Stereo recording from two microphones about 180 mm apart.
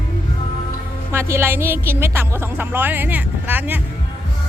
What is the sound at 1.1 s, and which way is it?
A woman's voice, 15° right (ahead or behind).